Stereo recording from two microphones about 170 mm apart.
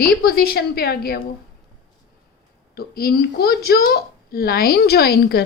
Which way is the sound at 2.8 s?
60° left (ahead or behind).